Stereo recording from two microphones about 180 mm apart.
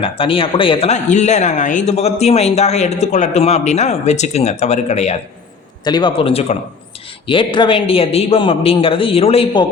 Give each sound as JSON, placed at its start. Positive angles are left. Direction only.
{"t": 0.0, "sound": "speech", "side_deg": 30}
{"t": 5.8, "sound": "a man's voice", "side_deg": 25}